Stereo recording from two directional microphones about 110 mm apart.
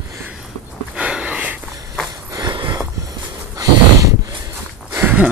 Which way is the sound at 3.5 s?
35° right (ahead or behind).